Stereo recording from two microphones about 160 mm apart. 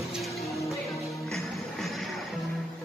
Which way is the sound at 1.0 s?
Centre (ahead or behind).